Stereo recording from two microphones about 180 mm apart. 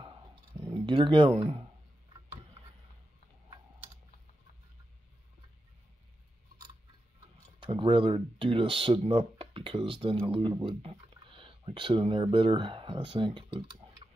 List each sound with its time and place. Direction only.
0.7 s speech: 25° right (ahead or behind)
7.6 s speech: 30° right (ahead or behind)